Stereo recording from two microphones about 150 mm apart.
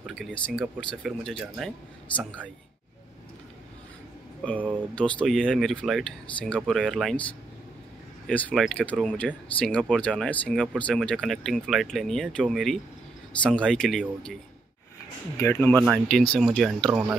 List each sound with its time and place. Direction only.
0.0 s speech: centre (ahead or behind)
4.9 s speech: 5° left (ahead or behind)
8.3 s speech: 10° left (ahead or behind)
15.3 s speech: 15° left (ahead or behind); by 17.2 s 5° right (ahead or behind)